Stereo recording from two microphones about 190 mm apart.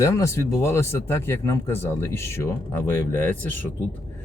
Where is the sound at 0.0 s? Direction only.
15° left (ahead or behind).